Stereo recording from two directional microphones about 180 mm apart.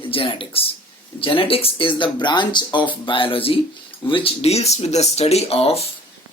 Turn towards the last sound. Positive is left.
turn(degrees=35)  # may be behind; listen again after turning